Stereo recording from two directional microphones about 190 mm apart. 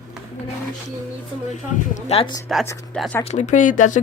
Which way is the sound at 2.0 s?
30° left (ahead or behind).